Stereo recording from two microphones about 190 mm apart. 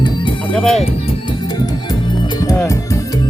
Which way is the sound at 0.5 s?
Centre (ahead or behind).